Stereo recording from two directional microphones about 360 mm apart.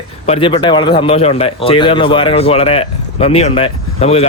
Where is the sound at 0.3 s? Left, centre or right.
Centre.